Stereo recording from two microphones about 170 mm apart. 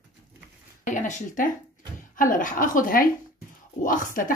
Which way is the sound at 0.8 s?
45° left (ahead or behind).